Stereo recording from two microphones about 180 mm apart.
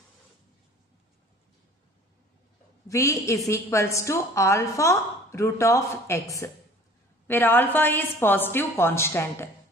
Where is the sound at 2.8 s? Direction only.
15° left (ahead or behind).